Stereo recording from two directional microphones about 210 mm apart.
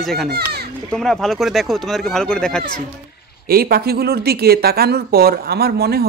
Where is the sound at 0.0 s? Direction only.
Centre (ahead or behind).